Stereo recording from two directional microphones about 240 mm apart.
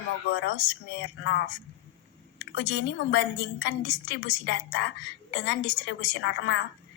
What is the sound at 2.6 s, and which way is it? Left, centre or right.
A woman's voice, left.